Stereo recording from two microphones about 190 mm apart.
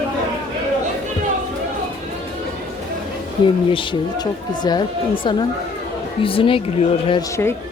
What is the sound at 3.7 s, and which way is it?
Speech, 25° left (ahead or behind).